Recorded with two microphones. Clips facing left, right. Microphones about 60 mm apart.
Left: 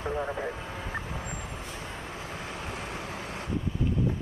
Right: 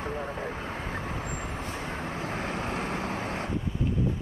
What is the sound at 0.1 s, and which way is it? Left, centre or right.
Vehicle, left.